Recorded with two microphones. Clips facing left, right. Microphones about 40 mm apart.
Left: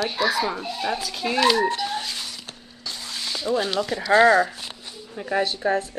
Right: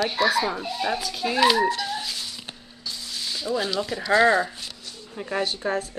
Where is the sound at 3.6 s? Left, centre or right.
Left.